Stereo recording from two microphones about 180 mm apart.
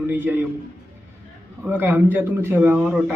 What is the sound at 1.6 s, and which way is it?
A man's voice, 10° right (ahead or behind).